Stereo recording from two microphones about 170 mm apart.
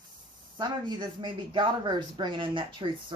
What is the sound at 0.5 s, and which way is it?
A man's voice, 25° right (ahead or behind).